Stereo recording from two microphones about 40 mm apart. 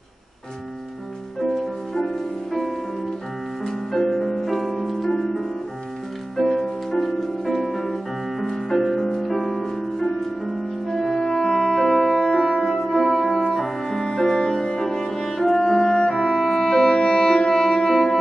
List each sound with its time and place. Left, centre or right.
3.6 s music: centre
5.0 s music: centre
9.7 s music: centre
11.2 s music: centre